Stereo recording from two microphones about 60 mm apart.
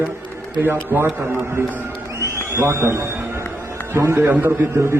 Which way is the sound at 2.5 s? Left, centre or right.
Right.